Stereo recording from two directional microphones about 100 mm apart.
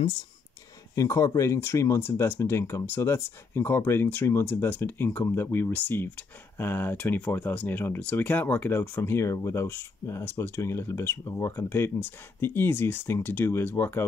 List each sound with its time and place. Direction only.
0.9 s speech: 35° left (ahead or behind)